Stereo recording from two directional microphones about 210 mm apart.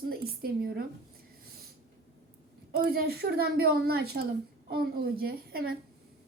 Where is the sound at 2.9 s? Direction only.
50° right (ahead or behind).